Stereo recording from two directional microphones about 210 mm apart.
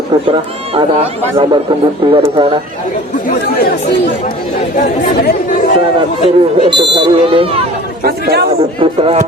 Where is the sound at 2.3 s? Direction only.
25° right (ahead or behind).